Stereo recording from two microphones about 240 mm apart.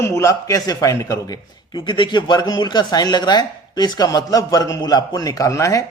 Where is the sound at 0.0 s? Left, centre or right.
Centre.